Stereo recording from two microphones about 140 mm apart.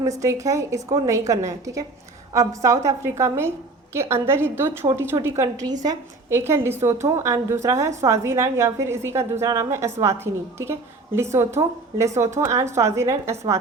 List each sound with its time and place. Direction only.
0.0 s a woman's voice: 25° right (ahead or behind)